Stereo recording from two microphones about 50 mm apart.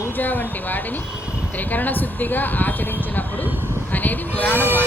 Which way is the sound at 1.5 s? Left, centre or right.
Left.